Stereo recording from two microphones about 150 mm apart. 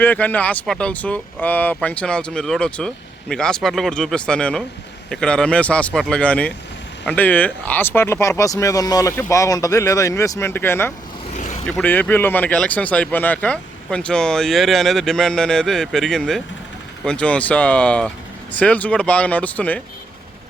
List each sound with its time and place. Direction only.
0.0 s speech: 10° left (ahead or behind)
11.3 s vehicle: 55° left (ahead or behind)
11.8 s speech: 10° left (ahead or behind)